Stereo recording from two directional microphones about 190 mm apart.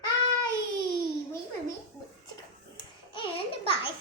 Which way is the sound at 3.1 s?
30° left (ahead or behind).